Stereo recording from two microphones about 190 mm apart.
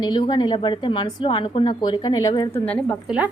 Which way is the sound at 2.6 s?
5° left (ahead or behind).